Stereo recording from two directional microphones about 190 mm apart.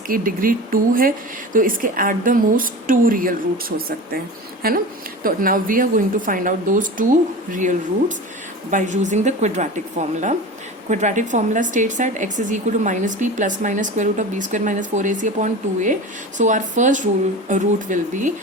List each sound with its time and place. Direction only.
0.1 s a woman's voice: 45° right (ahead or behind)